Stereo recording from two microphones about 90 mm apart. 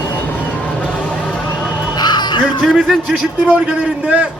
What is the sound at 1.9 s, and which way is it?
Music, 50° left (ahead or behind).